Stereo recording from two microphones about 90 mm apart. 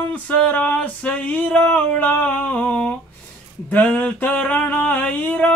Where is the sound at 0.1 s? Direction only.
15° left (ahead or behind).